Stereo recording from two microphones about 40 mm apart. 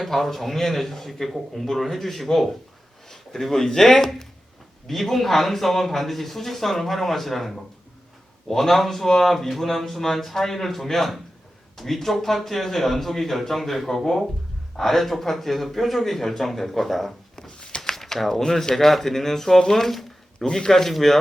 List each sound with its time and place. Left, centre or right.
0.0 s speech: centre
17.6 s a sound: left
17.9 s speech: centre
20.4 s speech: centre